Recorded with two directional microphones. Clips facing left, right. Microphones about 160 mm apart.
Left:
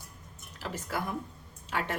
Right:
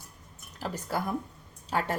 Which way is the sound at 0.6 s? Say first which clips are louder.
Right 3 dB; 40° right (ahead or behind).